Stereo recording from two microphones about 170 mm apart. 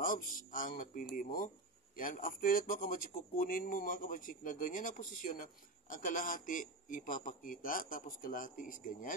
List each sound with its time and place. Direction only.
0.0 s speech: 55° left (ahead or behind)